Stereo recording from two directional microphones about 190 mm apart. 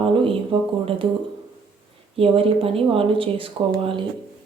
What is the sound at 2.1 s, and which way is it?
Speech, 30° right (ahead or behind).